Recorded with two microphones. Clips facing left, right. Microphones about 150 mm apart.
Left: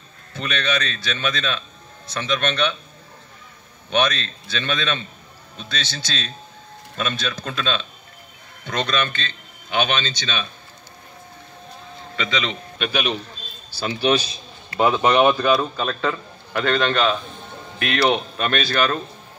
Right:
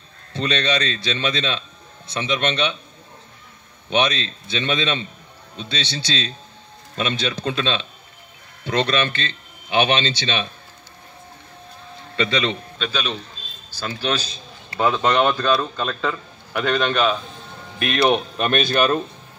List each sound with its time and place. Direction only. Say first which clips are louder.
0.3 s a man's voice: right 3 dB; 30° right (ahead or behind)
3.9 s a man's voice: right 1 dB; 25° right (ahead or behind)
12.2 s a man's voice: right 4 dB; 30° right (ahead or behind)
12.7 s a man's voice: left 2 dB; 15° left (ahead or behind)
16.6 s a man's voice: even; 15° right (ahead or behind)